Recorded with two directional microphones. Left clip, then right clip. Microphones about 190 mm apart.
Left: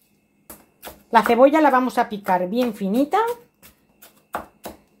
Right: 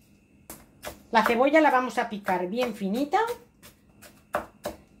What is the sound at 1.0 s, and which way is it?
Speech, 35° left (ahead or behind).